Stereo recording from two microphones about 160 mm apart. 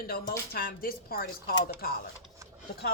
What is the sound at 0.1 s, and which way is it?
Speech, 75° left (ahead or behind).